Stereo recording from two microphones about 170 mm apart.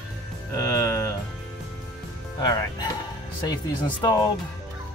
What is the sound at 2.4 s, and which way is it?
Speech, 25° left (ahead or behind).